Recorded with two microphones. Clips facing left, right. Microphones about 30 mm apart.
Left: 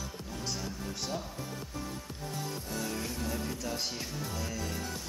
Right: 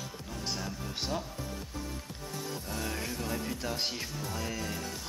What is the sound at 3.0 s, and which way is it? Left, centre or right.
Music, right.